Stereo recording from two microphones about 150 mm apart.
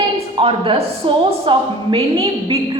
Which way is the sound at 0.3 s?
35° right (ahead or behind).